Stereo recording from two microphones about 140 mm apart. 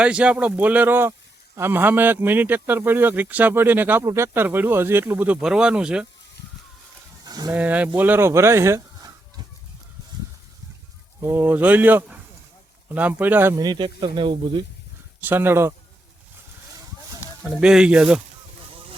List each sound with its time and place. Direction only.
0.0 s speech: 10° right (ahead or behind)
7.3 s a sound: 30° right (ahead or behind)
7.5 s speech: 10° right (ahead or behind)
11.2 s speech: 15° right (ahead or behind)
13.6 s speech: 30° right (ahead or behind)
15.2 s speech: 15° right (ahead or behind)
17.5 s speech: 5° right (ahead or behind)